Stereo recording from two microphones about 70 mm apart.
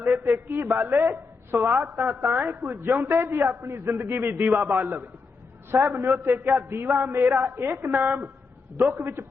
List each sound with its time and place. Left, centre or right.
0.2 s a woman's voice: right
5.7 s a woman's voice: right
7.9 s a woman's voice: right
8.9 s a man's voice: right